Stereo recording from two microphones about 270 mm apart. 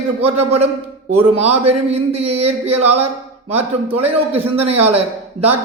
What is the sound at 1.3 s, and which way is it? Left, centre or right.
Speech, right.